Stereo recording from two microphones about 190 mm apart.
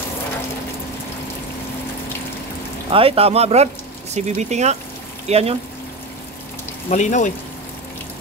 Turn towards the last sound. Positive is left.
turn(degrees=40)  # may be behind; listen again after turning